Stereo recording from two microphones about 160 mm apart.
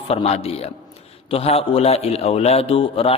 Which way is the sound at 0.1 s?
40° left (ahead or behind).